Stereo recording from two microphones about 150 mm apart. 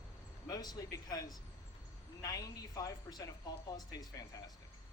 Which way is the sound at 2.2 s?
25° left (ahead or behind).